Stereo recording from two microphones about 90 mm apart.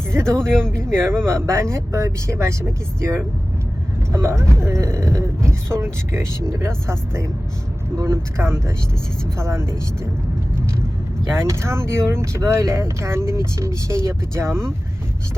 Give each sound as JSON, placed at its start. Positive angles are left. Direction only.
{"t": 0.3, "sound": "speech", "side_deg": -30}
{"t": 11.3, "sound": "speech", "side_deg": -30}